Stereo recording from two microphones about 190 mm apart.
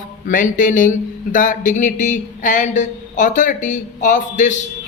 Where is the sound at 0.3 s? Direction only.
45° left (ahead or behind).